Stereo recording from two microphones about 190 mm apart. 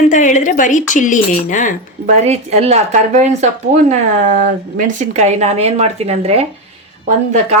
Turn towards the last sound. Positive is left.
turn(degrees=-35)  # may be behind; listen again after turning